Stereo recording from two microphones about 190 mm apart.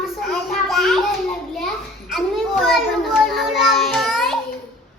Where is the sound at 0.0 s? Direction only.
Centre (ahead or behind).